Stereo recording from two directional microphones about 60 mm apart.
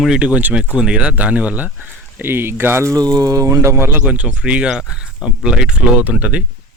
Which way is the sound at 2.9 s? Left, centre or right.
Right.